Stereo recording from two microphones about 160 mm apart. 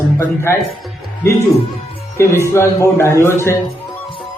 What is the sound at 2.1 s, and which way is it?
A man's voice, 15° left (ahead or behind).